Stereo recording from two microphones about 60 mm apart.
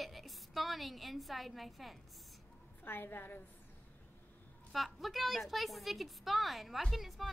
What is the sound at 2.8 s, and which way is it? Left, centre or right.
Speech, left.